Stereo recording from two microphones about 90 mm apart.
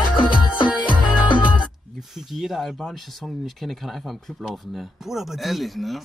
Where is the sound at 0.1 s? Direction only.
65° left (ahead or behind).